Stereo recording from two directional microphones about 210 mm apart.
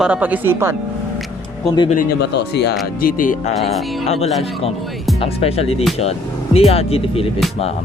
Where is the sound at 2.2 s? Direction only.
55° left (ahead or behind).